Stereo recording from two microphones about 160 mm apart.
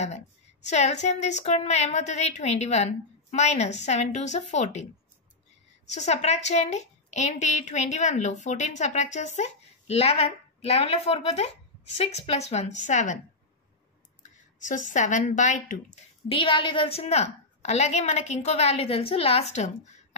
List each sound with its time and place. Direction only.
0.7 s a woman's voice: 45° left (ahead or behind)
5.9 s a woman's voice: 45° left (ahead or behind)
14.6 s a woman's voice: 50° left (ahead or behind)
16.3 s a woman's voice: 35° left (ahead or behind)